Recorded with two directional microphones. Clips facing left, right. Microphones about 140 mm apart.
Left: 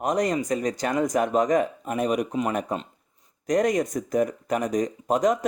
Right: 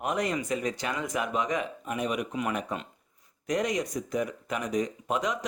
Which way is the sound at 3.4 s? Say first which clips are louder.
Left 6 dB; 45° left (ahead or behind).